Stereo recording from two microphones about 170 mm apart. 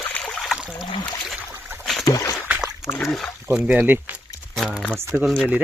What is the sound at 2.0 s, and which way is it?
Boat, 20° left (ahead or behind).